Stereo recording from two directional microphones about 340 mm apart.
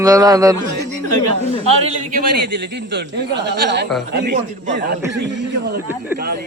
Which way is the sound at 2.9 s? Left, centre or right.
Right.